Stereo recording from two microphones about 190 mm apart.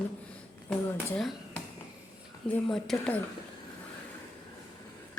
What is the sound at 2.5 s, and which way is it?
Speech, centre (ahead or behind).